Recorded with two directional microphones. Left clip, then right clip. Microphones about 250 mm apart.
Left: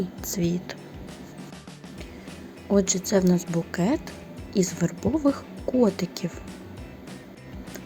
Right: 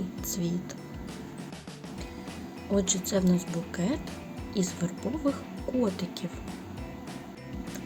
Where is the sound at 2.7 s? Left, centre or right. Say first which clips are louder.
Left 6 dB; left.